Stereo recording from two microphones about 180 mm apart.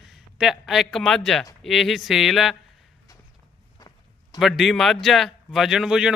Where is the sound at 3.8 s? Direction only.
20° left (ahead or behind).